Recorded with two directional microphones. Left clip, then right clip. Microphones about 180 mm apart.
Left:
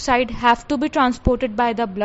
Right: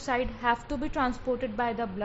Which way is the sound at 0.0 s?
55° left (ahead or behind).